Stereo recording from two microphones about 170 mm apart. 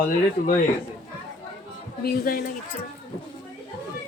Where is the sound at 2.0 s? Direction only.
65° left (ahead or behind).